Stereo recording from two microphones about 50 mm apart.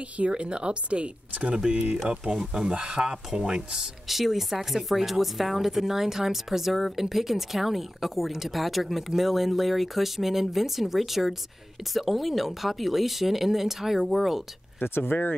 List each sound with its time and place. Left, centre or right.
0.3 s speech: centre
2.7 s speech: centre
14.8 s speech: left